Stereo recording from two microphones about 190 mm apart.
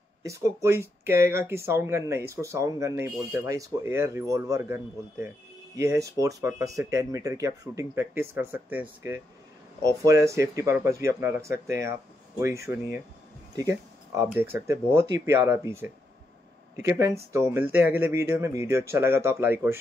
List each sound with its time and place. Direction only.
0.2 s speech: 15° right (ahead or behind)